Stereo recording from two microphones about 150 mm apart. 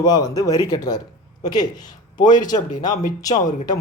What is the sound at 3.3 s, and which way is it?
Speech, 50° left (ahead or behind).